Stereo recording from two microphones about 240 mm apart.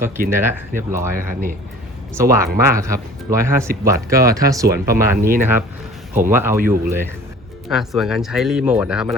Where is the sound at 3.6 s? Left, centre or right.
Right.